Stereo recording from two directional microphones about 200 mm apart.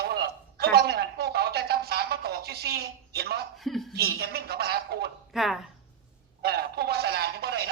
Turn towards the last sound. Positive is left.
turn(degrees=-50)  # may be behind; listen again after turning